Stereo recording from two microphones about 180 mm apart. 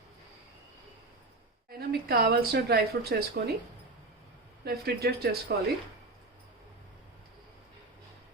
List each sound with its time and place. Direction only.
1.9 s a woman's voice: 60° right (ahead or behind)
4.6 s a woman's voice: 60° right (ahead or behind)